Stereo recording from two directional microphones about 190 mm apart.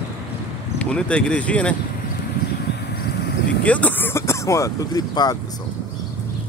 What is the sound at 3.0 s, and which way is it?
Vehicle, 60° left (ahead or behind).